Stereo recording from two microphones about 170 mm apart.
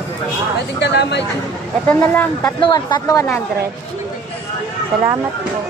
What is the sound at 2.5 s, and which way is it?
Speech, 25° left (ahead or behind).